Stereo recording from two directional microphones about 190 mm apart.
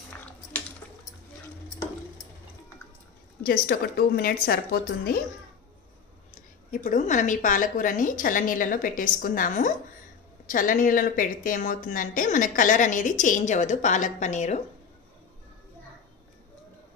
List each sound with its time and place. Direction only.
3.4 s speech: 50° left (ahead or behind)
6.7 s speech: 40° left (ahead or behind)